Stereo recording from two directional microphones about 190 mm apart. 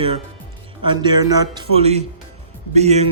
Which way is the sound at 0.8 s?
25° right (ahead or behind).